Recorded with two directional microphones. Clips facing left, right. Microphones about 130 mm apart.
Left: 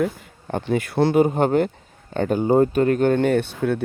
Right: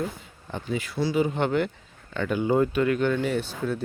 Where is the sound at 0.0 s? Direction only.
55° left (ahead or behind).